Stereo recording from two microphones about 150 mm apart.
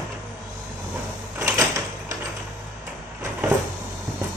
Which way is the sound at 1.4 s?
20° right (ahead or behind).